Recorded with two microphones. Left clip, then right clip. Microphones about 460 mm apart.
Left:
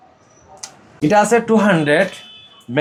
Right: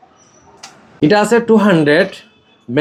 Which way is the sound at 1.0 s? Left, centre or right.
Centre.